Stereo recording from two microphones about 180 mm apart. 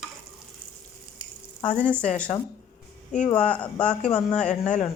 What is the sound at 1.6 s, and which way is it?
Speech, 40° left (ahead or behind).